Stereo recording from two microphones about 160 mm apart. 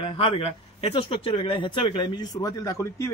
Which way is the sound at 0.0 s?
35° left (ahead or behind).